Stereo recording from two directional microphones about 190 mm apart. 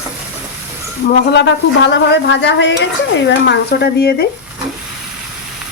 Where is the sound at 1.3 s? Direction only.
70° left (ahead or behind).